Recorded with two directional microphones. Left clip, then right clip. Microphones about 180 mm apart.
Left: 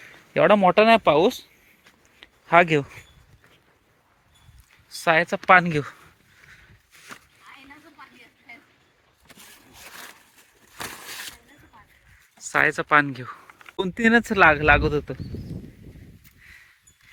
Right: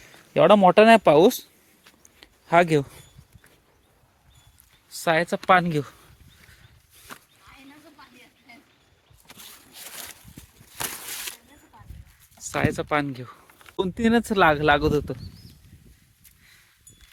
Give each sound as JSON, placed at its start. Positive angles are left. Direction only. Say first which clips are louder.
{"t": 0.0, "sound": "speech", "louder": "right 1 dB", "side_deg": -20}
{"t": 2.2, "sound": "speech", "louder": "left 2 dB", "side_deg": -20}
{"t": 4.9, "sound": "speech", "louder": "left 2 dB", "side_deg": -20}
{"t": 10.8, "sound": "a sound", "louder": "right 1 dB", "side_deg": -5}
{"t": 12.4, "sound": "speech", "louder": "left 5 dB", "side_deg": -10}